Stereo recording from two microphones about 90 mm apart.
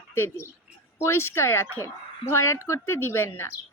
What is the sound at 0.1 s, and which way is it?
Speech, 25° left (ahead or behind).